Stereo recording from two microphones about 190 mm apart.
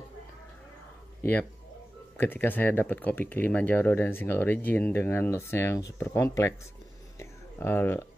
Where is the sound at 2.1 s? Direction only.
10° left (ahead or behind).